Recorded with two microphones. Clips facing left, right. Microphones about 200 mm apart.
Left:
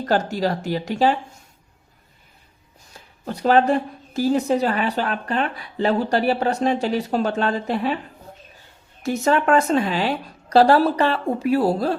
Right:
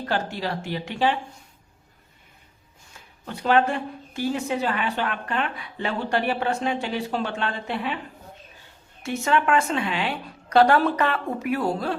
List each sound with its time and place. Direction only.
0.0 s a woman's voice: 40° left (ahead or behind)
3.2 s a woman's voice: 40° left (ahead or behind)
9.0 s a woman's voice: 40° left (ahead or behind)